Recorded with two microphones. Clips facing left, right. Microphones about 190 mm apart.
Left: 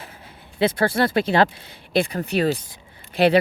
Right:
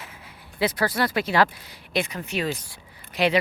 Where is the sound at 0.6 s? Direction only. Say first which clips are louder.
Left 4 dB; 25° left (ahead or behind).